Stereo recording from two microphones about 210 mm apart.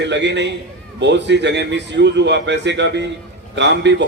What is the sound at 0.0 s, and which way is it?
A man's voice, 55° right (ahead or behind).